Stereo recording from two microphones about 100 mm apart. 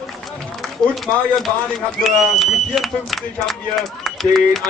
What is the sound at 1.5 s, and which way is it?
Speech, 25° right (ahead or behind).